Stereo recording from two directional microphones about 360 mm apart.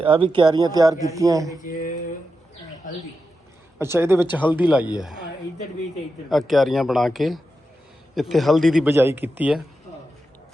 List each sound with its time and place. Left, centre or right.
0.0 s speech: centre
2.8 s a sound: left
3.8 s a man's voice: centre
6.2 s a man's voice: centre